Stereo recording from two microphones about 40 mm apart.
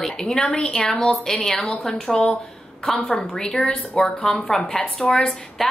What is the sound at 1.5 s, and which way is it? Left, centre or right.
Speech, left.